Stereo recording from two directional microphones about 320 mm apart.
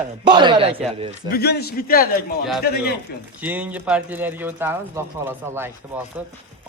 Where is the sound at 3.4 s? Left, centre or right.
Centre.